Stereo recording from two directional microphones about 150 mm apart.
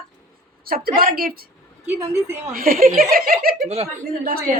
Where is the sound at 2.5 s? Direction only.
75° right (ahead or behind).